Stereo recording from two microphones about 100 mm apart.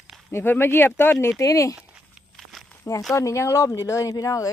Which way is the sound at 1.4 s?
35° left (ahead or behind).